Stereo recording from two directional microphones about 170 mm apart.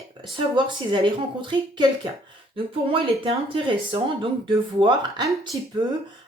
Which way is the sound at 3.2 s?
30° right (ahead or behind).